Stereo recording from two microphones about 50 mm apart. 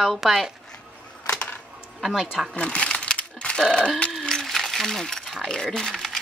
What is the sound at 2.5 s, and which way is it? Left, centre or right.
Crumpling, left.